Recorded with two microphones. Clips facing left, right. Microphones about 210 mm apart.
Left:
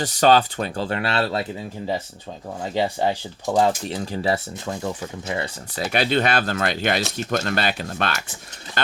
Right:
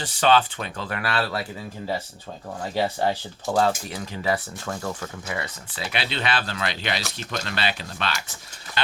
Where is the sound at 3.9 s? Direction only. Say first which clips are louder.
Left 3 dB; 35° left (ahead or behind).